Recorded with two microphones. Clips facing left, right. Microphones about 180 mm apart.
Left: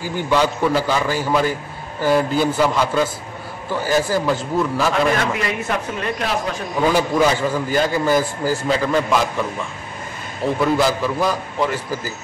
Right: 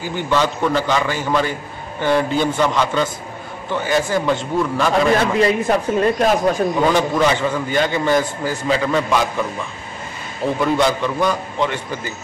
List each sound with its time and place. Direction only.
0.3 s a man's voice: 10° left (ahead or behind)
5.2 s speech: 30° right (ahead or behind)
6.9 s a man's voice: 10° left (ahead or behind)